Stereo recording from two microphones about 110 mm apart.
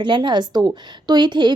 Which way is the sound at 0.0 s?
45° right (ahead or behind).